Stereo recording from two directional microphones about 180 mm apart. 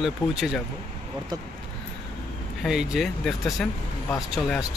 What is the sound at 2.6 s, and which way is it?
Speech, centre (ahead or behind).